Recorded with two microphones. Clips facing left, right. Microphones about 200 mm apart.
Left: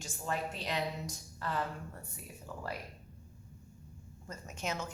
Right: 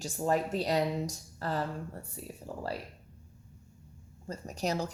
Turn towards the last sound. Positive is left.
turn(degrees=-35)  # may be behind; listen again after turning